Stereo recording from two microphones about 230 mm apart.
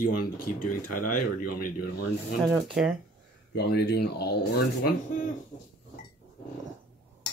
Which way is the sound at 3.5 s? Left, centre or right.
Left.